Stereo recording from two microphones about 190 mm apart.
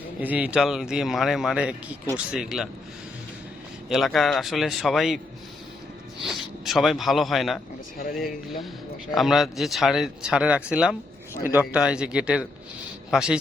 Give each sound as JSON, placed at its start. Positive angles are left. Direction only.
{"t": 0.2, "sound": "speech", "side_deg": -10}
{"t": 3.8, "sound": "speech", "side_deg": 0}
{"t": 6.2, "sound": "a man's voice", "side_deg": 0}